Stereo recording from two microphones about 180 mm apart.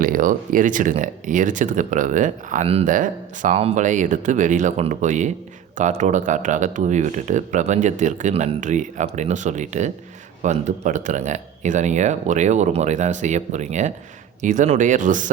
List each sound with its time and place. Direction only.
0.0 s speech: 50° right (ahead or behind)